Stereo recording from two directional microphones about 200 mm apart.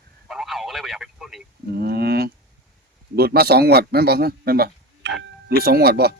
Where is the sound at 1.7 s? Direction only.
50° right (ahead or behind).